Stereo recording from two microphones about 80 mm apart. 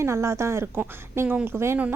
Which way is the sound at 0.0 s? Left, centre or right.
Right.